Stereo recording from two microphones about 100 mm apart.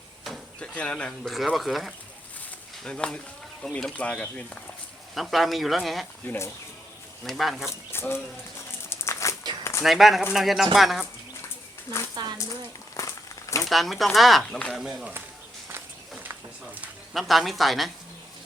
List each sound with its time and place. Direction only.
0.3 s speech: 10° left (ahead or behind)
5.1 s speech: centre (ahead or behind)
6.2 s speech: 25° left (ahead or behind)
7.3 s speech: centre (ahead or behind)
7.9 s speech: 25° left (ahead or behind)
8.9 s a sound: 30° left (ahead or behind)
9.8 s speech: centre (ahead or behind)
12.1 s a sound: 45° right (ahead or behind)
13.0 s a sound: 30° left (ahead or behind)
13.6 s a man's voice: centre (ahead or behind)
17.2 s speech: centre (ahead or behind)